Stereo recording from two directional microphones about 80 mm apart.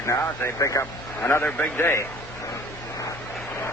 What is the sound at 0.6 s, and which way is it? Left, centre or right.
Speech, left.